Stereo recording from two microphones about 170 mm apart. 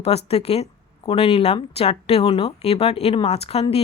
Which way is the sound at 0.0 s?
35° left (ahead or behind).